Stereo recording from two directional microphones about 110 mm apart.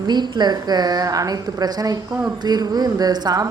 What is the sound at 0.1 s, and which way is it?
A woman's voice, 40° right (ahead or behind).